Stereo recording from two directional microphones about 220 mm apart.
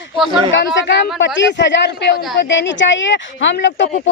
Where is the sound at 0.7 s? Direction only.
55° left (ahead or behind).